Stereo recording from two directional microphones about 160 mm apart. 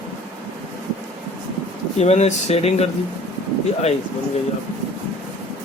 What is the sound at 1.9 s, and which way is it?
Speech, 40° left (ahead or behind).